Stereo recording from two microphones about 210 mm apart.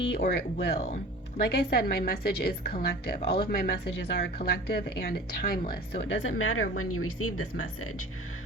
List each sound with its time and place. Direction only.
0.1 s a woman's voice: 50° left (ahead or behind); by 8.0 s 90° left